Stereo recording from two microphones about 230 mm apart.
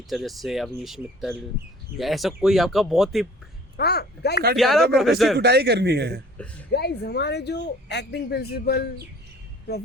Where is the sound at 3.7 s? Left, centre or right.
Left.